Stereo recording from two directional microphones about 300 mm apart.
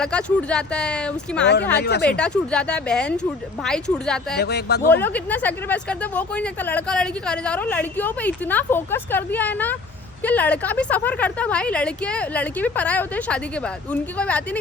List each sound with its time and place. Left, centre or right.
0.0 s speech: centre
1.7 s speech: left
2.0 s speech: centre
4.4 s speech: left
5.0 s speech: centre